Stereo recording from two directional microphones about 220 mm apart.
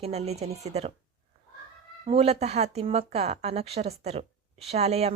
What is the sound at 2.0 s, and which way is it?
A woman's voice, 30° right (ahead or behind).